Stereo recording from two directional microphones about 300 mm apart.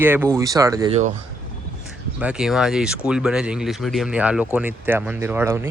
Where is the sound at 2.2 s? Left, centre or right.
Centre.